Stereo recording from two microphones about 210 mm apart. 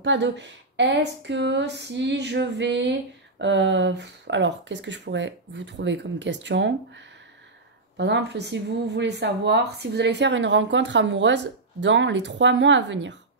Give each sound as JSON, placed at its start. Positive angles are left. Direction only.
{"t": 0.0, "sound": "speech", "side_deg": -60}
{"t": 8.0, "sound": "speech", "side_deg": -55}